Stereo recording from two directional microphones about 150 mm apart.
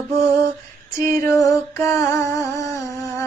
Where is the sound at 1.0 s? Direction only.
20° left (ahead or behind).